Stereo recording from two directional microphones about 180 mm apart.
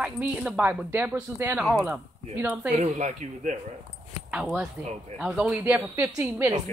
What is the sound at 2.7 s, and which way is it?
Speech, 40° right (ahead or behind).